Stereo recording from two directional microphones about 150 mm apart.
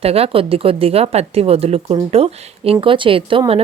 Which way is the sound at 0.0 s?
40° right (ahead or behind).